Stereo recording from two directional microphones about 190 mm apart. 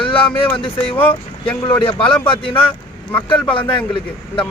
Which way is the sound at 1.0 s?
10° left (ahead or behind).